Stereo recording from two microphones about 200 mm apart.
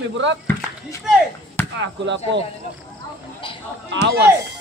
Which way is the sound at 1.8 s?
65° right (ahead or behind).